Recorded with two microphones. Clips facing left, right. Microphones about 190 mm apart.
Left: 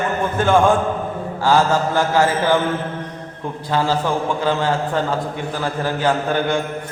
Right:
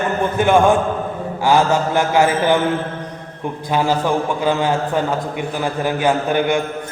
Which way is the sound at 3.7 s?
15° right (ahead or behind).